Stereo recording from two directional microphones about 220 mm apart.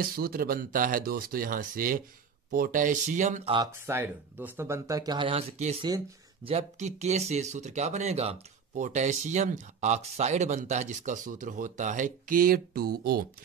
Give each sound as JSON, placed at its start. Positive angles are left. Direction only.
{"t": 0.0, "sound": "speech", "side_deg": -45}
{"t": 3.5, "sound": "speech", "side_deg": -15}
{"t": 5.9, "sound": "speech", "side_deg": -20}
{"t": 6.5, "sound": "speech", "side_deg": -30}